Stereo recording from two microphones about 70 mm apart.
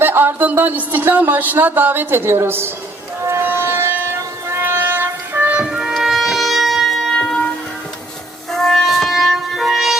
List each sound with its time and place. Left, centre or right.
0.0 s speech: right
3.2 s music: right
5.6 s music: centre
7.2 s music: centre
8.5 s music: centre